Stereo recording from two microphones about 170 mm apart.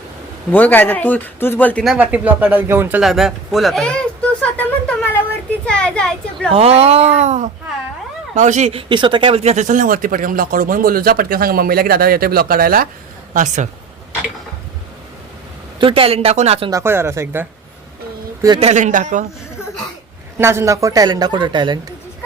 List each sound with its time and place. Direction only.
0.5 s speech: 10° left (ahead or behind)
1.8 s speech: 5° right (ahead or behind)
3.0 s a sound: centre (ahead or behind)
5.6 s a child's voice: 5° left (ahead or behind)
6.5 s speech: 35° right (ahead or behind)
8.9 s speech: 30° right (ahead or behind); by 12.9 s 60° right (ahead or behind)
13.3 s a man's voice: 50° right (ahead or behind)
15.8 s speech: 35° right (ahead or behind)
16.6 s speech: 15° right (ahead or behind)
18.6 s a man's voice: 45° right (ahead or behind)
20.4 s a woman's voice: 15° right (ahead or behind)